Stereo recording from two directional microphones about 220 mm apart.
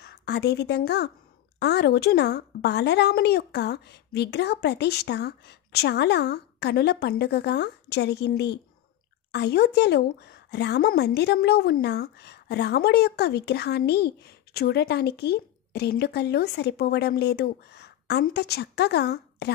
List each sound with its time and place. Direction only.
0.0 s a woman's voice: 50° left (ahead or behind)